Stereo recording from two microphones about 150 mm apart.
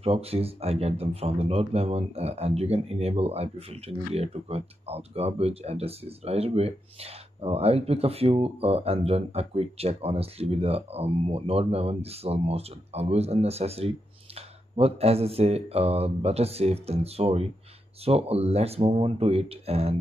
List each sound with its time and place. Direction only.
0.0 s speech: 40° right (ahead or behind)